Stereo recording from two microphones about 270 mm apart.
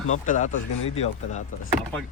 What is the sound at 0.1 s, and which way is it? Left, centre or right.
Speech, left.